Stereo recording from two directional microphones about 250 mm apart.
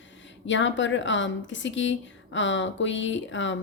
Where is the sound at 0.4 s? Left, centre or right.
Left.